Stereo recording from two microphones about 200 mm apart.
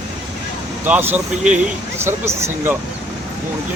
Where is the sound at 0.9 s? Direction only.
10° right (ahead or behind).